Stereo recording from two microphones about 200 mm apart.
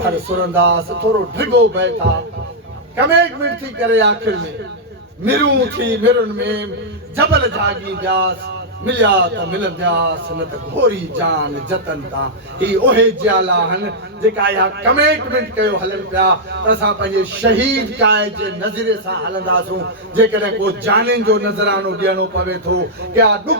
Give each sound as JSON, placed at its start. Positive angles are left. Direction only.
{"t": 0.5, "sound": "a man's voice", "side_deg": -60}
{"t": 13.0, "sound": "a man's voice", "side_deg": -60}